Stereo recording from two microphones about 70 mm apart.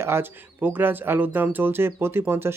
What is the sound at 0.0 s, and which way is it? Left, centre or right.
Speech, right.